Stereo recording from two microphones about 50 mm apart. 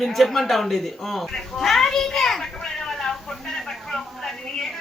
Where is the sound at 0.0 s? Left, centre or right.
Centre.